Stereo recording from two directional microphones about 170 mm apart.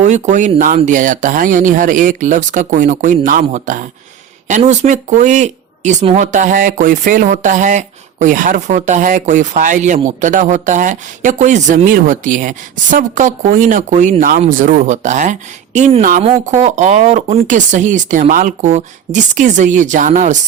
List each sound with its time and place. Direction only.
0.0 s a woman's voice: 45° right (ahead or behind)